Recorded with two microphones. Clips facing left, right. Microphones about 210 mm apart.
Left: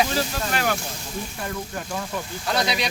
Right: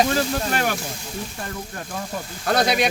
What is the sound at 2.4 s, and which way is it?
Speech, 50° right (ahead or behind).